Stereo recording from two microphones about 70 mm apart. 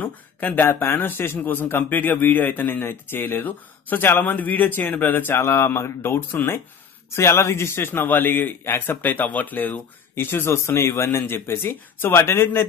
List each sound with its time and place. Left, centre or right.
0.0 s speech: left
5.3 s a man's voice: left